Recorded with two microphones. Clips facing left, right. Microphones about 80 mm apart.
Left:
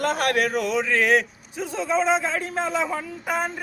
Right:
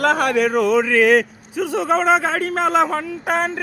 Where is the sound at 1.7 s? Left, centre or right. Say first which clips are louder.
Right 5 dB; right.